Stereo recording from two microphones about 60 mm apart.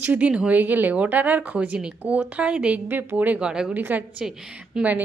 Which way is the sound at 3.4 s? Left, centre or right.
Centre.